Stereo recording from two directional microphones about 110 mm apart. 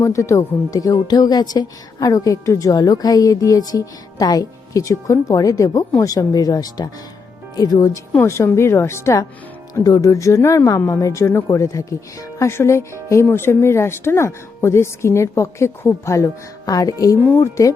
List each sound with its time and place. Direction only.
0.0 s speech: 30° left (ahead or behind)
8.1 s speech: 25° left (ahead or behind)
9.7 s speech: 35° left (ahead or behind)
17.2 s speech: 20° left (ahead or behind)